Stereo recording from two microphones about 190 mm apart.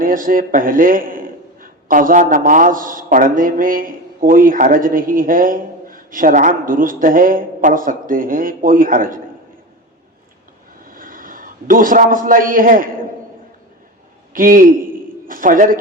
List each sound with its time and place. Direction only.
0.0 s a man's voice: 45° right (ahead or behind)
10.8 s a man's voice: 50° right (ahead or behind)
14.3 s a man's voice: 45° right (ahead or behind)